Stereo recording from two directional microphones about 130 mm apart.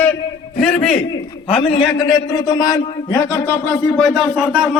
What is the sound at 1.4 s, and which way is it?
A man's voice, 40° left (ahead or behind).